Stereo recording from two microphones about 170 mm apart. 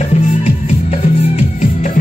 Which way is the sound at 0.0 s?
45° left (ahead or behind).